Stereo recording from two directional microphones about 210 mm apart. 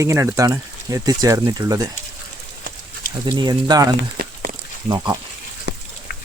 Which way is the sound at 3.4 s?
20° right (ahead or behind).